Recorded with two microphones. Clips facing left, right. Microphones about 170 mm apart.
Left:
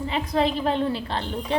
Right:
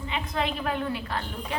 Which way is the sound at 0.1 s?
35° left (ahead or behind).